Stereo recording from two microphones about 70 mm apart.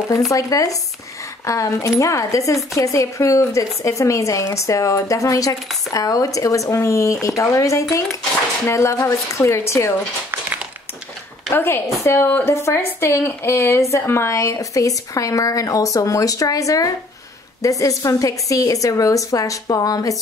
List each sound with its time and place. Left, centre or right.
0.3 s speech: left
11.5 s a woman's voice: left